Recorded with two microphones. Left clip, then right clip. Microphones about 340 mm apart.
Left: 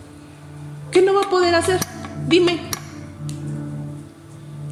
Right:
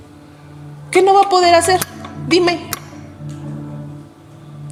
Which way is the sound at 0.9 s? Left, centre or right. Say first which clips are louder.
Right 5 dB; centre.